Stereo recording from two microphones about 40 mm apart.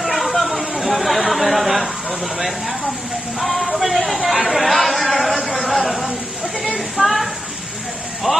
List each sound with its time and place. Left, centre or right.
0.0 s chatter: centre
2.3 s speech: centre
3.3 s a sound: centre
7.0 s speech: centre
8.3 s speech: centre